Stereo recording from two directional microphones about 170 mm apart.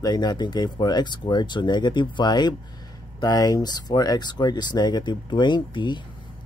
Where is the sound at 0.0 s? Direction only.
25° left (ahead or behind).